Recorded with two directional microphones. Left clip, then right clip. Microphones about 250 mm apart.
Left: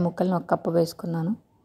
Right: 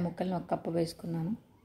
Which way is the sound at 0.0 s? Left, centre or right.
Left.